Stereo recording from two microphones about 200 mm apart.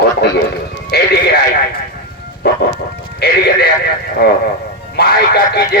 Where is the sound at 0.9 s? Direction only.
50° left (ahead or behind).